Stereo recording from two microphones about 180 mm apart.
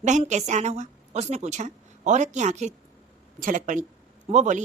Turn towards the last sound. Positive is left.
turn(degrees=-40)  # may be behind; listen again after turning